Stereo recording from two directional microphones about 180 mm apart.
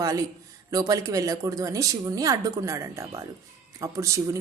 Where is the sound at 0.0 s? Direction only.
20° right (ahead or behind).